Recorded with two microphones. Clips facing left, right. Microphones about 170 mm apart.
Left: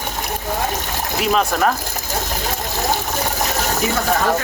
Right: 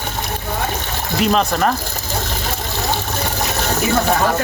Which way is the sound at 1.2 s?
5° left (ahead or behind).